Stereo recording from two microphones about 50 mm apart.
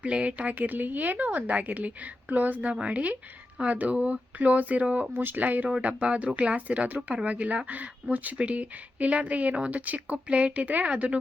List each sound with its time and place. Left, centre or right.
0.0 s a woman's voice: right
2.7 s a woman's voice: right
5.1 s a woman's voice: right